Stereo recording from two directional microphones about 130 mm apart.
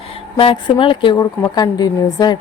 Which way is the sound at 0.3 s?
40° left (ahead or behind).